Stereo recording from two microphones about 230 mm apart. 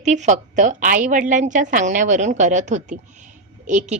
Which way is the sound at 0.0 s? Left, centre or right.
Right.